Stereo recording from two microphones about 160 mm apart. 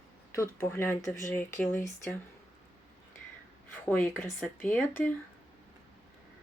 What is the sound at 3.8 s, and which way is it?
Speech, 10° left (ahead or behind).